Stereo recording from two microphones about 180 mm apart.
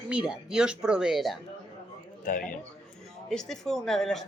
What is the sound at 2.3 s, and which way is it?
Speech, 50° left (ahead or behind).